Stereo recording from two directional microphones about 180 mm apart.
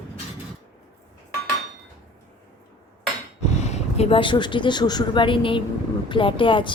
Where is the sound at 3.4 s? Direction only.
40° left (ahead or behind).